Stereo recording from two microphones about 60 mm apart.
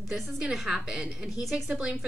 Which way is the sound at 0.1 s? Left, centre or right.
Centre.